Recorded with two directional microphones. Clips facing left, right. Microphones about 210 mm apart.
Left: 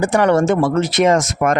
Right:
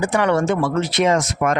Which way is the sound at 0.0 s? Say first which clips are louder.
Left 4 dB; 45° left (ahead or behind).